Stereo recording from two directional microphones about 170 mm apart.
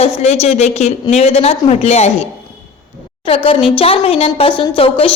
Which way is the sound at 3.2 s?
35° left (ahead or behind).